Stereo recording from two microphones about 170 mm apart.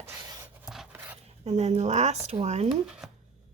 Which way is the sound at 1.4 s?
40° right (ahead or behind).